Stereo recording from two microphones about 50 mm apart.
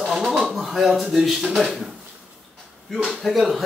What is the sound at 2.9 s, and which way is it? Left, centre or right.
Speech, centre.